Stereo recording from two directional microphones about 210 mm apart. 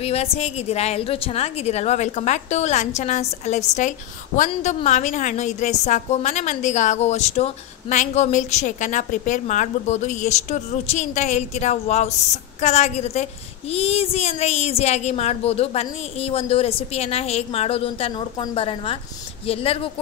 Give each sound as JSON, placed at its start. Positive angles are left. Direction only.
{"t": 0.0, "sound": "a woman's voice", "side_deg": 30}